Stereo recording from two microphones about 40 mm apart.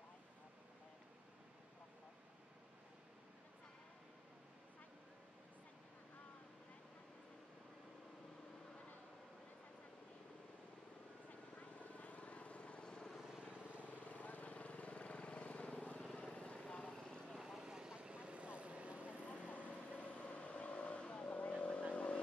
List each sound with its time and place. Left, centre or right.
11.2 s vehicle: left
13.4 s vehicle: right
13.7 s vehicle: left
16.9 s vehicle: centre
17.4 s vehicle: centre
17.6 s vehicle: centre
20.0 s vehicle: left